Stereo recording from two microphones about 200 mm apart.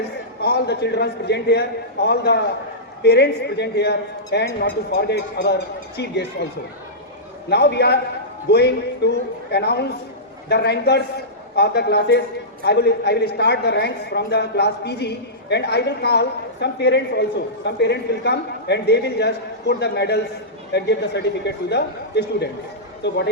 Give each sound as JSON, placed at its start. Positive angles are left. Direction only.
{"t": 0.4, "sound": "a woman's voice", "side_deg": 55}
{"t": 7.5, "sound": "a woman's voice", "side_deg": 55}